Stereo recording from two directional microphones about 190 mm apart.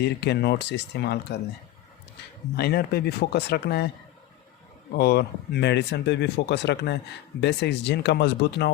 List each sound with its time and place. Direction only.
0.0 s speech: 60° left (ahead or behind)
2.6 s speech: 55° left (ahead or behind)
4.9 s speech: 60° left (ahead or behind)